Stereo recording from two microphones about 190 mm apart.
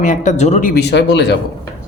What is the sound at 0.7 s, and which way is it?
Speech, 60° left (ahead or behind).